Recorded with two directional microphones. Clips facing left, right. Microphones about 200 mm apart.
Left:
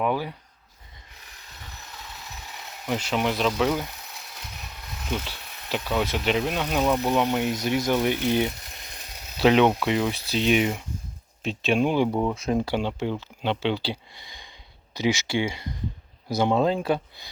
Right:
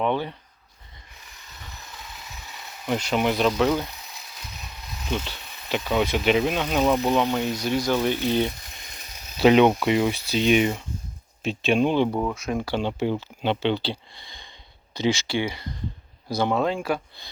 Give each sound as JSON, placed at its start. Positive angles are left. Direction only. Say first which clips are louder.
{"t": 0.0, "sound": "speech", "louder": "right 1 dB", "side_deg": 5}
{"t": 3.0, "sound": "speech", "louder": "right 3 dB", "side_deg": 0}
{"t": 5.6, "sound": "speech", "louder": "right 3 dB", "side_deg": 0}
{"t": 7.3, "sound": "speech", "louder": "even", "side_deg": 15}
{"t": 9.4, "sound": "speech", "louder": "right 2 dB", "side_deg": 0}
{"t": 12.3, "sound": "speech", "louder": "left 3 dB", "side_deg": 30}
{"t": 12.8, "sound": "speech", "louder": "right 3 dB", "side_deg": -5}
{"t": 16.6, "sound": "speech", "louder": "left 2 dB", "side_deg": 30}